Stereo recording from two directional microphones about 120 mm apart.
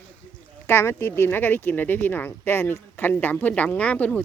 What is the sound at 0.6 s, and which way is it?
Speech, 20° left (ahead or behind).